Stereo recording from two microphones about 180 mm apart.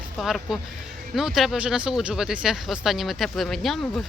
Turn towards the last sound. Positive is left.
turn(degrees=0)  # may be behind; listen again after turning